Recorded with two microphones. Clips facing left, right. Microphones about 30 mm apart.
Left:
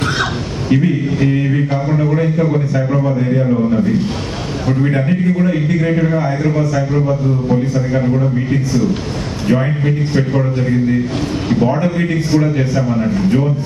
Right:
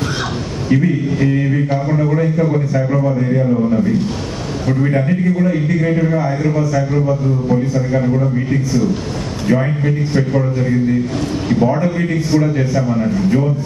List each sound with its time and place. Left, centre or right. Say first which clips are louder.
2.1 s a man's voice: even; left
2.4 s a man's voice: even; centre
4.9 s a man's voice: even; left
9.6 s a man's voice: left 1 dB; centre
11.6 s a man's voice: even; left
12.3 s a man's voice: even; centre